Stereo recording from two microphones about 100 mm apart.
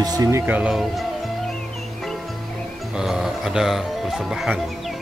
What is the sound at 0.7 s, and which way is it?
Speech, centre (ahead or behind).